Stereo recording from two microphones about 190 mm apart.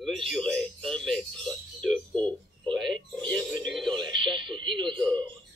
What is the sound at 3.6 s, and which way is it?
Radio, centre (ahead or behind).